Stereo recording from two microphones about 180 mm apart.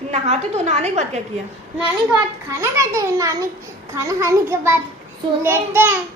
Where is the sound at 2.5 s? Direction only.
15° right (ahead or behind).